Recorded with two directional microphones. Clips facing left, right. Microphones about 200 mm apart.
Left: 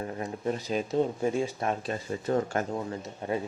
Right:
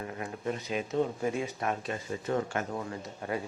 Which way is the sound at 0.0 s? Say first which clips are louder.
Left 3 dB; 35° left (ahead or behind).